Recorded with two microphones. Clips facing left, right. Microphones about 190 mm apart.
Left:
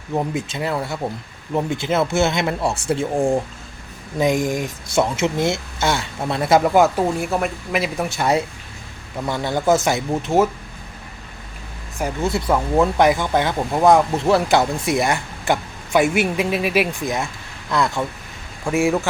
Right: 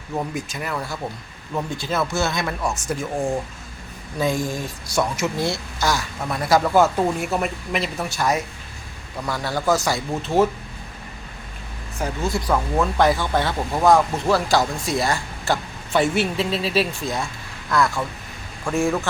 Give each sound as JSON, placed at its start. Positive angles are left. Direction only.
{"t": 0.1, "sound": "speech", "side_deg": 25}
{"t": 7.2, "sound": "speech", "side_deg": 0}
{"t": 7.9, "sound": "speech", "side_deg": 25}
{"t": 11.9, "sound": "speech", "side_deg": 15}